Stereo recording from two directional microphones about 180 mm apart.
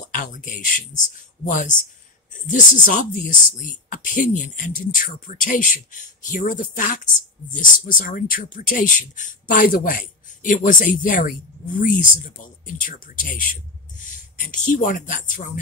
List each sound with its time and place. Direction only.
0.1 s speech: 45° left (ahead or behind)